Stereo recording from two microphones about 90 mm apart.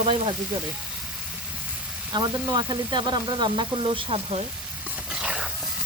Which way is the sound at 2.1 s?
50° right (ahead or behind).